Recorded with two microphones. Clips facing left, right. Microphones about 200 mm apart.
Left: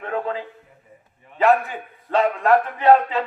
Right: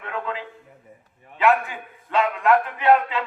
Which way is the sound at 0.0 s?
35° left (ahead or behind).